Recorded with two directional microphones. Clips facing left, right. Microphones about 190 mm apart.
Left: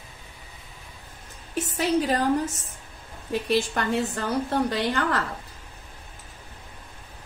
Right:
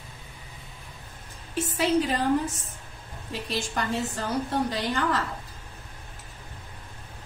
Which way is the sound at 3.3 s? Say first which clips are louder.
Left 8 dB; 60° left (ahead or behind).